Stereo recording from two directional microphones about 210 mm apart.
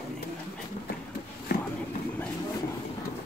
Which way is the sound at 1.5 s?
45° left (ahead or behind).